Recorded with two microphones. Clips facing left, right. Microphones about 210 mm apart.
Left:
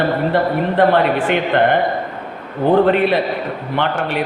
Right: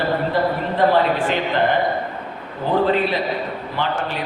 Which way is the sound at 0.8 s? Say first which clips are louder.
Left 2 dB; 60° left (ahead or behind).